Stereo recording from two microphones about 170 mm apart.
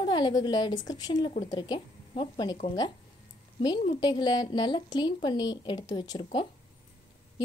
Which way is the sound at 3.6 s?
25° left (ahead or behind).